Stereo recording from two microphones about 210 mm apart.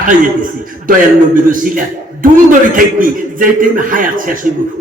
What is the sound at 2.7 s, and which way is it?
A man's voice, 40° right (ahead or behind).